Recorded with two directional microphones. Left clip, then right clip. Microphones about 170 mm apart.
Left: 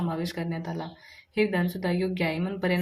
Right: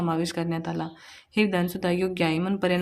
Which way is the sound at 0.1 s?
40° right (ahead or behind).